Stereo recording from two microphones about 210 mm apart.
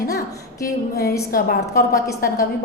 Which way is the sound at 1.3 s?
40° left (ahead or behind).